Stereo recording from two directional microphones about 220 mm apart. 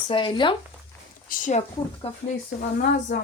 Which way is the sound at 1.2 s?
35° left (ahead or behind).